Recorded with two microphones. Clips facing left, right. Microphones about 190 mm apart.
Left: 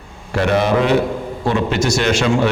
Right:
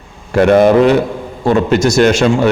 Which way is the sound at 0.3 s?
50° right (ahead or behind).